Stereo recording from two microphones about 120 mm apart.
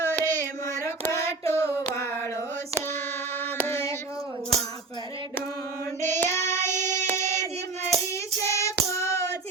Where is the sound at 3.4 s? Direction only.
20° left (ahead or behind).